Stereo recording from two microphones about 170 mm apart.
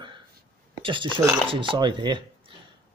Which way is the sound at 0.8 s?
30° right (ahead or behind).